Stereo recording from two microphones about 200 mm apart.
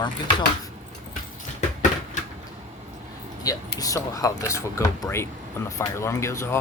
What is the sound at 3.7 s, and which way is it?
Speech, 15° left (ahead or behind).